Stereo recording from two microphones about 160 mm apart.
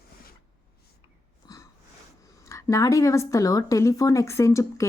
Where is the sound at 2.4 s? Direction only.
20° left (ahead or behind).